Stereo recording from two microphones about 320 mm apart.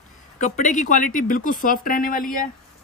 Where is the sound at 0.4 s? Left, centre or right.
Left.